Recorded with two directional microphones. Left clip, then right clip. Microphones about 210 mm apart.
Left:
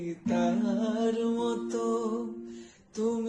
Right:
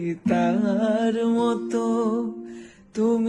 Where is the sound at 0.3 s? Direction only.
50° right (ahead or behind).